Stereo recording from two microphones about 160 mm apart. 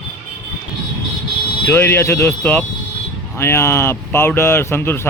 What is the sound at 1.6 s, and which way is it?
A man's voice, 15° left (ahead or behind).